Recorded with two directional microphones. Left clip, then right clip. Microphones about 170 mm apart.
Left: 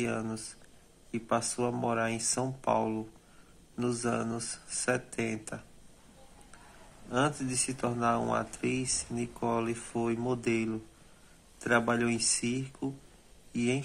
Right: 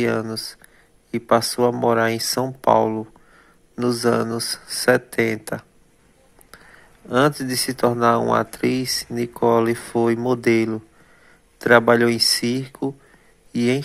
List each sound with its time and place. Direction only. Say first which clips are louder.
0.0 s speech: right 12 dB; 35° right (ahead or behind)
7.1 s speech: right 12 dB; 40° right (ahead or behind)